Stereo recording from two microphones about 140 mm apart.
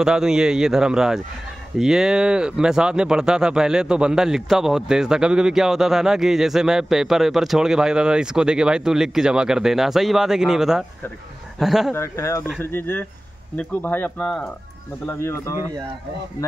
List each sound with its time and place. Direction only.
0.0 s speech: 5° right (ahead or behind)
11.9 s speech: 20° left (ahead or behind)
15.0 s speech: 20° left (ahead or behind)